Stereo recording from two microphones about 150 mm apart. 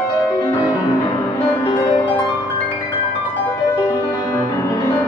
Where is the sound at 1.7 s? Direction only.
30° left (ahead or behind).